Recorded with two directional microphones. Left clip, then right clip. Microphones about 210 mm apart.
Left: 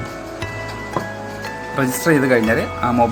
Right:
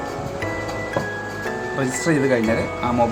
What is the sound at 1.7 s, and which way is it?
Speech, 15° left (ahead or behind).